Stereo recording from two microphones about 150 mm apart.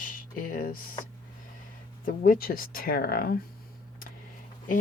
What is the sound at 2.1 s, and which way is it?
Speech, 75° left (ahead or behind).